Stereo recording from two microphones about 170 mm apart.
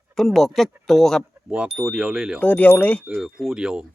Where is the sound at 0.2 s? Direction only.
Centre (ahead or behind).